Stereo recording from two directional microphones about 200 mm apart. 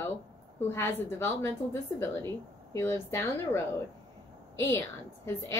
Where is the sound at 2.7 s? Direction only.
15° left (ahead or behind).